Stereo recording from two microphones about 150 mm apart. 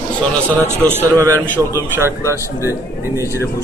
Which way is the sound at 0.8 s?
20° right (ahead or behind).